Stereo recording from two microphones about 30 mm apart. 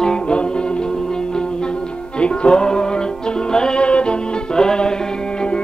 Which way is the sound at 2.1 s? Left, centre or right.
Left.